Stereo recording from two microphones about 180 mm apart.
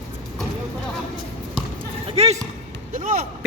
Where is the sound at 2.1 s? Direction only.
35° right (ahead or behind).